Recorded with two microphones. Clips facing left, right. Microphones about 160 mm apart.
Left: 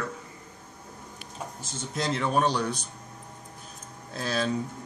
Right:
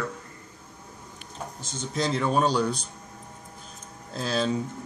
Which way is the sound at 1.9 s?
Centre (ahead or behind).